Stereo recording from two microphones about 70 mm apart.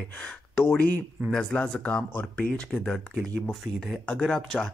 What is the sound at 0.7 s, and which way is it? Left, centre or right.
Speech, left.